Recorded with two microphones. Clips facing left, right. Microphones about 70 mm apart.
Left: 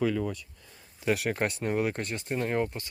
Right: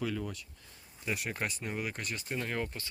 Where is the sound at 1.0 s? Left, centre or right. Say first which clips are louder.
Left 9 dB; left.